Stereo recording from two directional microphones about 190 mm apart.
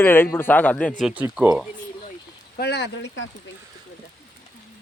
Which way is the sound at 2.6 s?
65° left (ahead or behind).